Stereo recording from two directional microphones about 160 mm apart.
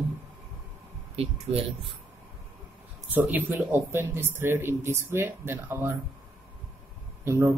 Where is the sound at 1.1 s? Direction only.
40° right (ahead or behind).